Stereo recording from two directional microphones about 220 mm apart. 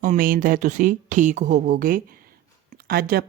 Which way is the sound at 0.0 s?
40° right (ahead or behind).